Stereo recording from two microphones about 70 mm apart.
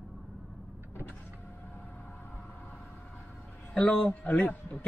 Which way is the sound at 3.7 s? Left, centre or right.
Centre.